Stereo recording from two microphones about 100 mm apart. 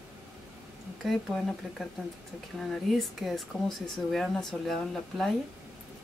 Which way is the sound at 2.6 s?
Centre (ahead or behind).